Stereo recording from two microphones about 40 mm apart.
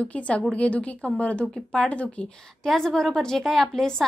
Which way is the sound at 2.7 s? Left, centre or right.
Centre.